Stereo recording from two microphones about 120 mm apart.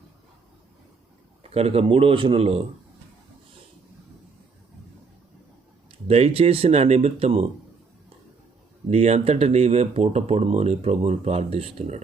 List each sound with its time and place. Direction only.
1.5 s a man's voice: 55° right (ahead or behind)
6.1 s speech: 60° right (ahead or behind)
8.9 s speech: 65° right (ahead or behind)